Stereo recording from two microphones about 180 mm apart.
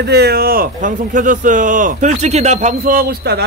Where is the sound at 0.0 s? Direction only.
65° right (ahead or behind).